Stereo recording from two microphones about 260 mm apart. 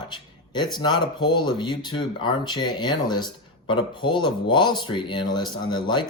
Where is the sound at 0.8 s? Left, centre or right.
Centre.